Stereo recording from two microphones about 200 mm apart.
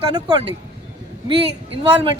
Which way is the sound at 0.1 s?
20° right (ahead or behind).